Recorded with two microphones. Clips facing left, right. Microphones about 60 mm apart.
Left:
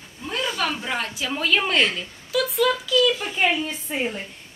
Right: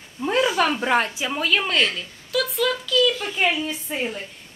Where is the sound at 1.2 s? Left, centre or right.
Centre.